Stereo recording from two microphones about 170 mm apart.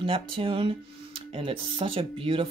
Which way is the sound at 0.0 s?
30° right (ahead or behind).